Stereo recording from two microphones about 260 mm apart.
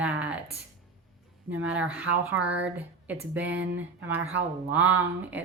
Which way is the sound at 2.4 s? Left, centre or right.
Right.